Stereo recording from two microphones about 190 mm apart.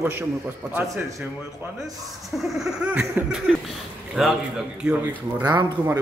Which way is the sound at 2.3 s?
Centre (ahead or behind).